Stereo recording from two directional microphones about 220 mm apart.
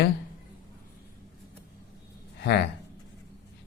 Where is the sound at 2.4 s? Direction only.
50° left (ahead or behind).